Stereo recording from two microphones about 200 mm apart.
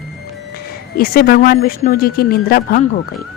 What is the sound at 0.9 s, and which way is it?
Speech, 50° left (ahead or behind).